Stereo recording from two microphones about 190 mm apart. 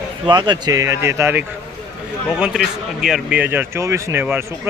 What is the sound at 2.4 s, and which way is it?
A man's voice, centre (ahead or behind).